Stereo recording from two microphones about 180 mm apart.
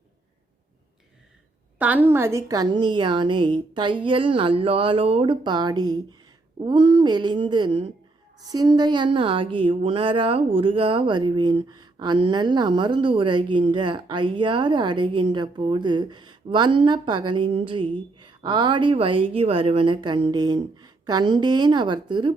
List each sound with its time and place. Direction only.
1.8 s speech: 10° right (ahead or behind); by 22.3 s 25° right (ahead or behind)